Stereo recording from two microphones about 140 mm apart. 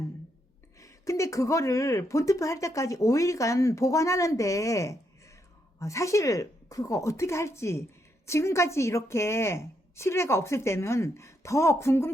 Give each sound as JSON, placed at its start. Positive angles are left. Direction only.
{"t": 0.8, "sound": "speech", "side_deg": 20}